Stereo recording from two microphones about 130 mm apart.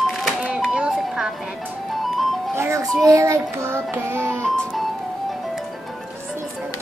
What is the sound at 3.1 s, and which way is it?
Child singing, 20° right (ahead or behind).